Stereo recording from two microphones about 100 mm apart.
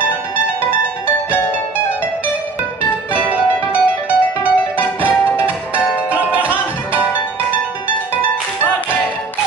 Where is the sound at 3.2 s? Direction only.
15° right (ahead or behind).